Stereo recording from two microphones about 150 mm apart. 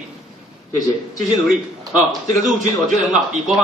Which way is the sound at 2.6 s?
55° right (ahead or behind).